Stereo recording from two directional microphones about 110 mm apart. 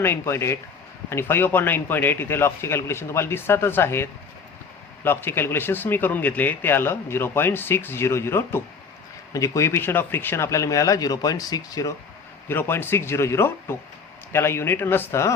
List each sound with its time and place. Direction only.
0.0 s speech: 25° left (ahead or behind)
12.5 s speech: 20° left (ahead or behind)